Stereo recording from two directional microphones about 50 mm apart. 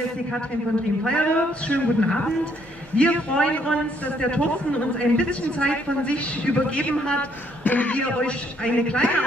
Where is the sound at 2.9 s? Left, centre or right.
Left.